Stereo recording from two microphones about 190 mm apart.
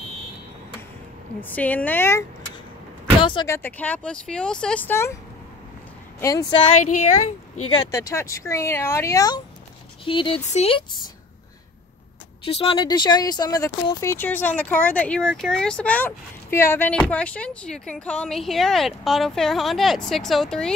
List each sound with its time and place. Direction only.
1.4 s speech: 10° left (ahead or behind)
3.2 s speech: 25° left (ahead or behind)
3.4 s speech: 10° left (ahead or behind)
6.2 s speech: 20° left (ahead or behind)
6.8 s speech: 40° left (ahead or behind)
7.7 s speech: 20° left (ahead or behind)
12.4 s speech: 30° left (ahead or behind); by 20.7 s 5° left (ahead or behind)